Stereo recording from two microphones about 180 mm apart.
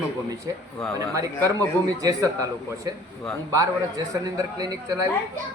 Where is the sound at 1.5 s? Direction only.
20° right (ahead or behind).